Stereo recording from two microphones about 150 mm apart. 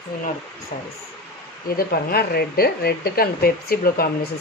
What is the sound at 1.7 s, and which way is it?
Speech, 90° left.